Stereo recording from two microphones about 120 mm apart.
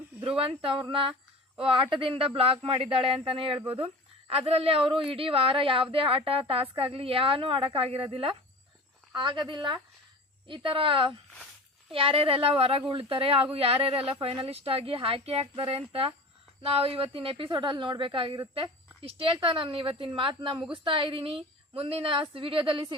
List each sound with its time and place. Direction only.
0.3 s speech: 50° right (ahead or behind)